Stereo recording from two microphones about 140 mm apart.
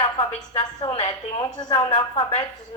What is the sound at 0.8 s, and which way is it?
Speech, 50° left (ahead or behind).